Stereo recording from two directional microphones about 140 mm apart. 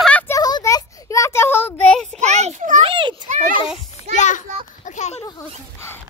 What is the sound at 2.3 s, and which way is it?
Children playing, 55° right (ahead or behind).